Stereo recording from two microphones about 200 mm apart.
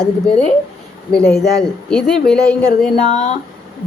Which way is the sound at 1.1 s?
5° left (ahead or behind).